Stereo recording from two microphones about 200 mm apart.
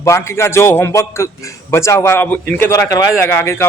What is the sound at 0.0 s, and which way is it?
Speech, 15° left (ahead or behind).